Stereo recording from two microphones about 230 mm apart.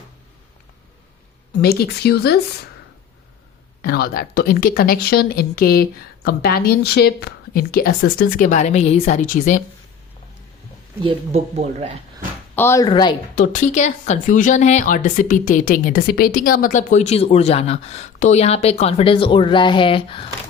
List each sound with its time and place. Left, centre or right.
1.6 s speech: left
3.8 s speech: left
11.0 s speech: right
12.5 s speech: centre
13.3 s speech: left